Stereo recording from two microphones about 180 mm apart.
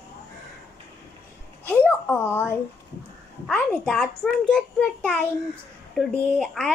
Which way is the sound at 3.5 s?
5° left (ahead or behind).